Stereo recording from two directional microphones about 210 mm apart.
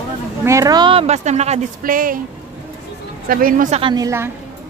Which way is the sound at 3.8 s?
20° right (ahead or behind).